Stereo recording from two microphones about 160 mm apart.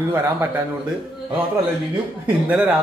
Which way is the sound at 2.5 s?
5° right (ahead or behind).